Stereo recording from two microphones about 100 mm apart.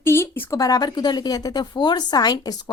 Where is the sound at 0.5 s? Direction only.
40° left (ahead or behind).